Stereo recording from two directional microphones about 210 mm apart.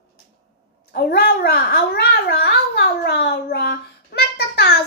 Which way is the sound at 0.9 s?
50° left (ahead or behind).